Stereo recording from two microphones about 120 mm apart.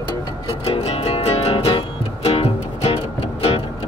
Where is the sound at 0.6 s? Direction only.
55° left (ahead or behind).